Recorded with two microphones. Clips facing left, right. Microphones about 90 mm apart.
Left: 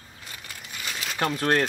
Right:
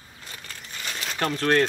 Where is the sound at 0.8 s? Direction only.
5° left (ahead or behind).